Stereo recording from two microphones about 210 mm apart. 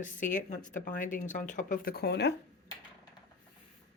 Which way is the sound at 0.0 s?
40° left (ahead or behind).